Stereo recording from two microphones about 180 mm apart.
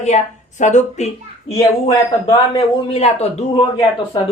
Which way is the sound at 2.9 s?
35° left (ahead or behind).